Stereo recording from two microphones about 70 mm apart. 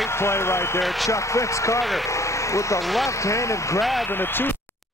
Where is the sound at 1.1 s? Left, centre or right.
Left.